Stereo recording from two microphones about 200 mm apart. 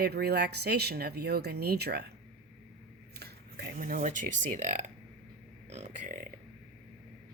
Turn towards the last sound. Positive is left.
turn(degrees=-35)  # may be behind; listen again after turning